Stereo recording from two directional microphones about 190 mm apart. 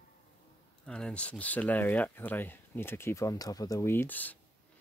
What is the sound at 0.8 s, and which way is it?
Speech, 5° left (ahead or behind).